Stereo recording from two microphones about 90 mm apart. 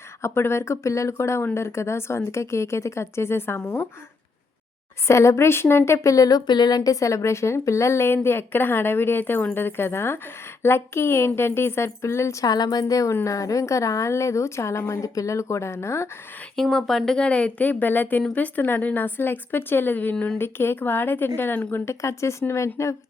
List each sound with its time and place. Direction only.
0.2 s speech: 30° left (ahead or behind)
5.0 s speech: 30° left (ahead or behind)
16.6 s speech: 5° left (ahead or behind); by 23.0 s 30° left (ahead or behind)